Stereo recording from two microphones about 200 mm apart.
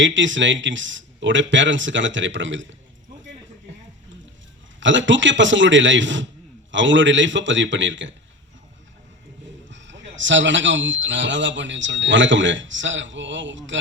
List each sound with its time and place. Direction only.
0.0 s speech: 70° right (ahead or behind)
4.8 s speech: 70° right (ahead or behind)
9.6 s speech: 65° right (ahead or behind)